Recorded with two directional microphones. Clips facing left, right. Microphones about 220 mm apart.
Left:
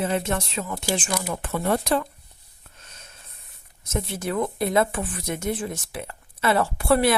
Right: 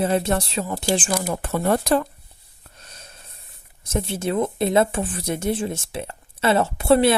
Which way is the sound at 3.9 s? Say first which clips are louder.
Right 4 dB; 30° right (ahead or behind).